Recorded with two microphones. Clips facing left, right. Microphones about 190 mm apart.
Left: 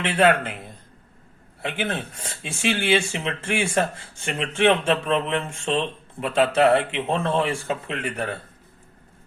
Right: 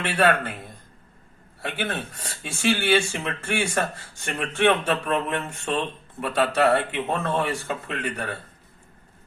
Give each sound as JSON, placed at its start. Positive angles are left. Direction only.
{"t": 0.0, "sound": "speech", "side_deg": 20}